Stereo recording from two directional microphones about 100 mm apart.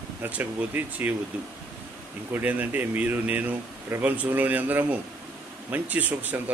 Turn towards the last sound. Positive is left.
turn(degrees=-15)  # may be behind; listen again after turning